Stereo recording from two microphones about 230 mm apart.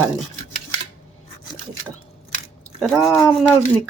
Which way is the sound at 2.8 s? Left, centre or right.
Centre.